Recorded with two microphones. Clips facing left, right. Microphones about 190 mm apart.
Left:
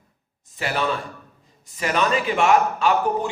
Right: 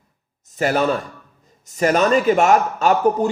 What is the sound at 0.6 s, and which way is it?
A man's voice, 45° right (ahead or behind).